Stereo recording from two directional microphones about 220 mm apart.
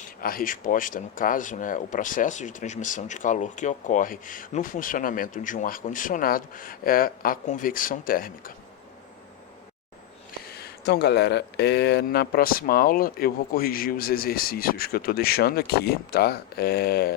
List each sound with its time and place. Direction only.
0.2 s speech: 40° left (ahead or behind)
10.5 s speech: 45° left (ahead or behind)